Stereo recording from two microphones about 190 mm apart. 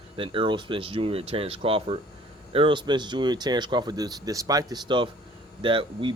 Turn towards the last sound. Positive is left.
turn(degrees=-25)  # may be behind; listen again after turning